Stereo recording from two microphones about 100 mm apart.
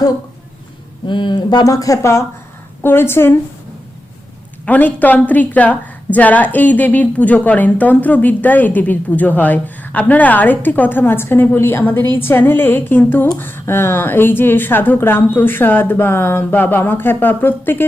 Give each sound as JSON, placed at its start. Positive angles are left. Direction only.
{"t": 1.0, "sound": "speech", "side_deg": 55}
{"t": 1.6, "sound": "speech", "side_deg": 35}
{"t": 4.6, "sound": "a woman's voice", "side_deg": 15}